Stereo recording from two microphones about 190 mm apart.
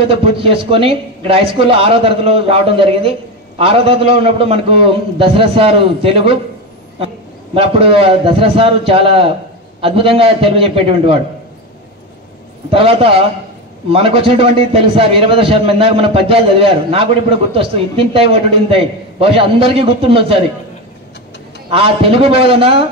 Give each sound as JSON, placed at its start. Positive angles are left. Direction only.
{"t": 0.1, "sound": "a man's voice", "side_deg": -30}
{"t": 7.5, "sound": "a man's voice", "side_deg": -30}
{"t": 12.7, "sound": "a man's voice", "side_deg": -30}
{"t": 21.6, "sound": "a man's voice", "side_deg": -30}